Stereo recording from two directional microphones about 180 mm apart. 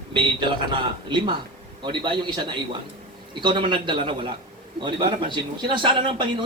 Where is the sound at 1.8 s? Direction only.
25° right (ahead or behind).